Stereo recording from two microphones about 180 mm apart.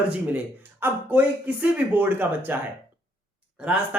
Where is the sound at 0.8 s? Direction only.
10° right (ahead or behind).